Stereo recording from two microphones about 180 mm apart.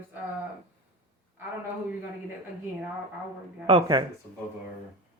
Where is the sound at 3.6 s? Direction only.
25° right (ahead or behind).